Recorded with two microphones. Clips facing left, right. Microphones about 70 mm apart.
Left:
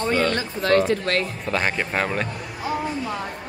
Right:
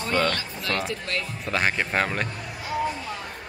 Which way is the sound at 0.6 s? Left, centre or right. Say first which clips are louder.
Left 10 dB; left.